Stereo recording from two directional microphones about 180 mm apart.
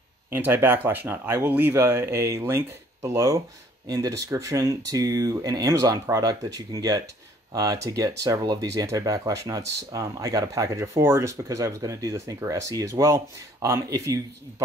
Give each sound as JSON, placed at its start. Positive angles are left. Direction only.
{"t": 0.3, "sound": "speech", "side_deg": -10}